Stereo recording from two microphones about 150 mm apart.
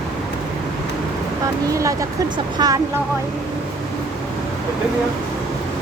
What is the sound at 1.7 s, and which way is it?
Speech, 20° right (ahead or behind).